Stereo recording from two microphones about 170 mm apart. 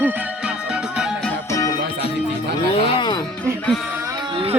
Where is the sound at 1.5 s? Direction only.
20° left (ahead or behind).